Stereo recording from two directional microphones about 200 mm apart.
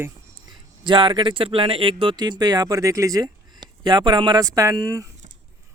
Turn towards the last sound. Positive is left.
turn(degrees=-15)  # may be behind; listen again after turning